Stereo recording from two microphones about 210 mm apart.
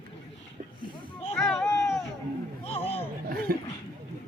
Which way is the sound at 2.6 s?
30° left (ahead or behind).